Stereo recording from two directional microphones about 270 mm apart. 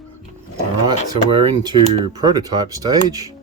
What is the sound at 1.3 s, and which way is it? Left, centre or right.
Speech, centre.